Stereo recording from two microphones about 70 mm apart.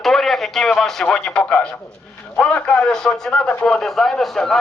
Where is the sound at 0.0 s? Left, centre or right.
Centre.